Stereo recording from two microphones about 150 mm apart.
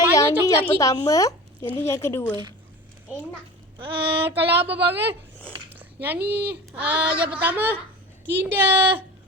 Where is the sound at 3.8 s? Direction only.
35° right (ahead or behind).